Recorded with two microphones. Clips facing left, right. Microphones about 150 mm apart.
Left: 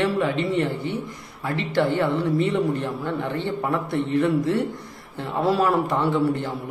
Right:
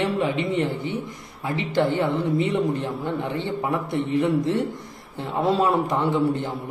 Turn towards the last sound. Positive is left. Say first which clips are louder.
# even
turn(degrees=-20)  # may be behind; listen again after turning